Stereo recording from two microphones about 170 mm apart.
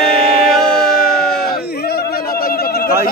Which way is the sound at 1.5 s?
70° left (ahead or behind).